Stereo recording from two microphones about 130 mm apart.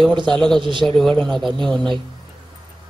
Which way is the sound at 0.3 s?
Centre (ahead or behind).